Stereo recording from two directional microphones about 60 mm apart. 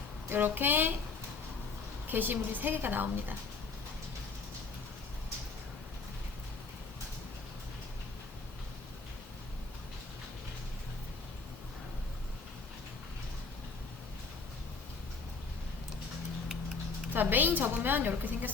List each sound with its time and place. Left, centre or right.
0.3 s a woman's voice: right
2.0 s a woman's voice: right
17.2 s a woman's voice: right